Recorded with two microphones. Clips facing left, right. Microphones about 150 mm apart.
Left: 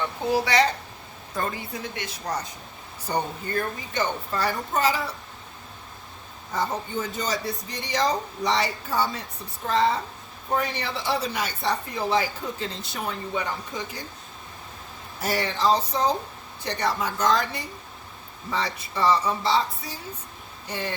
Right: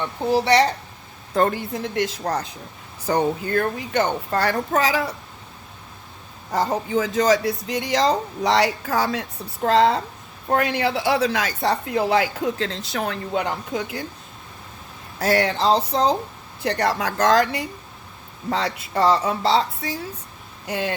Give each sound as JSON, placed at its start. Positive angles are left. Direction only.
{"t": 1.3, "sound": "speech", "side_deg": -70}
{"t": 3.1, "sound": "a woman's voice", "side_deg": -90}
{"t": 6.5, "sound": "a woman's voice", "side_deg": -90}
{"t": 15.2, "sound": "a woman's voice", "side_deg": -90}
{"t": 20.7, "sound": "a woman's voice", "side_deg": -80}